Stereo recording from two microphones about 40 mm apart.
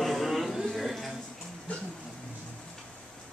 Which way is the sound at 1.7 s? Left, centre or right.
Left.